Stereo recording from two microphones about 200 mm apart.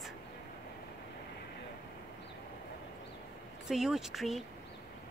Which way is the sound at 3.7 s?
Centre (ahead or behind).